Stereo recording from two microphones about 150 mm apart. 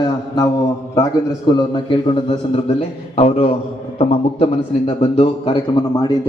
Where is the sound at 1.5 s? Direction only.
35° left (ahead or behind).